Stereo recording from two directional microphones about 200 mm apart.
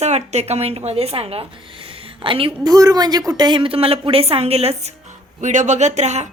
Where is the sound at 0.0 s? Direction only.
35° right (ahead or behind).